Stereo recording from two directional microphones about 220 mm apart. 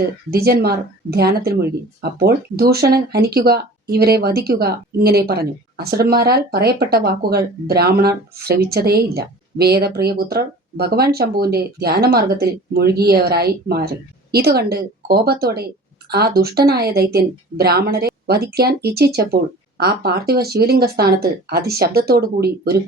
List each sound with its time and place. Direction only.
0.3 s speech: 45° right (ahead or behind)